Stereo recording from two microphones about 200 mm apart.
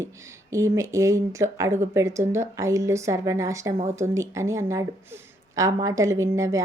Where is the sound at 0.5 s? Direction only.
15° right (ahead or behind).